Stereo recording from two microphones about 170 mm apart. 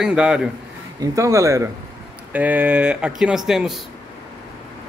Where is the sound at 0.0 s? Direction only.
5° right (ahead or behind).